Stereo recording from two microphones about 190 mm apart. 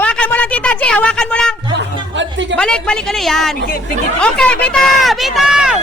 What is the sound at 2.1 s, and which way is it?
Music, 75° right (ahead or behind).